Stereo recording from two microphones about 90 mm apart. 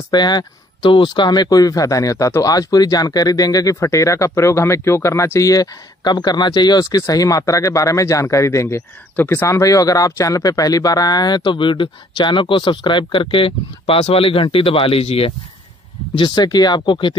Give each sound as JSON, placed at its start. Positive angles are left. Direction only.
{"t": 0.1, "sound": "speech", "side_deg": 55}
{"t": 9.1, "sound": "speech", "side_deg": 20}
{"t": 9.5, "sound": "speech", "side_deg": 40}
{"t": 16.4, "sound": "speech", "side_deg": 50}